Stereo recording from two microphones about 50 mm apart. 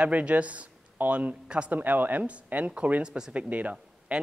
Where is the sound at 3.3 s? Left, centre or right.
Right.